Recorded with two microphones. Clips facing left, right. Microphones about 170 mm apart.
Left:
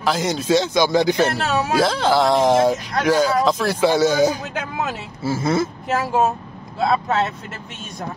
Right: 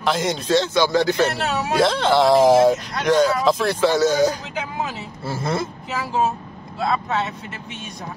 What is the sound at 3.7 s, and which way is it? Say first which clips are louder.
Speech: left 4 dB; 10° left (ahead or behind).